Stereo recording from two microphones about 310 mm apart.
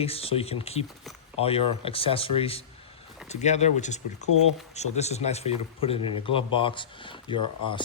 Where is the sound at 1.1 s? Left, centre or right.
Centre.